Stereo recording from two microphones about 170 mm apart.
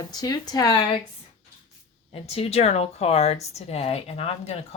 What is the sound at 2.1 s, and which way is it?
Speech, 35° left (ahead or behind).